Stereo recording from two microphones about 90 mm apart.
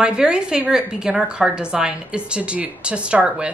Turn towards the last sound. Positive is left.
turn(degrees=-15)  # may be behind; listen again after turning